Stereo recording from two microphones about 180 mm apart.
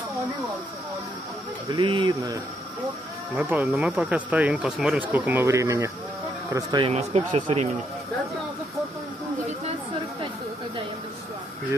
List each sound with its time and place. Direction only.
1.7 s speech: 25° right (ahead or behind)
3.3 s speech: 5° right (ahead or behind); by 6.9 s 25° right (ahead or behind)
6.9 s speech: 35° right (ahead or behind)